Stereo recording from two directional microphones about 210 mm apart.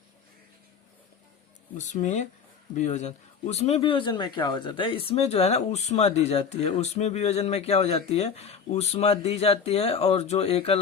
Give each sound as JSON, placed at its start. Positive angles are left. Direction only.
{"t": 1.8, "sound": "speech", "side_deg": 35}